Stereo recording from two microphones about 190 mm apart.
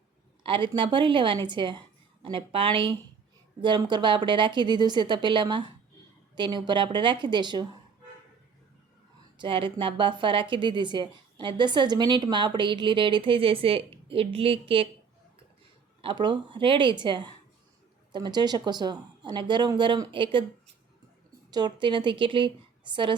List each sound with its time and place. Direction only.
0.4 s a woman's voice: 25° right (ahead or behind)
9.4 s a woman's voice: 25° right (ahead or behind)
16.0 s a woman's voice: 25° right (ahead or behind)
21.5 s a woman's voice: 25° right (ahead or behind)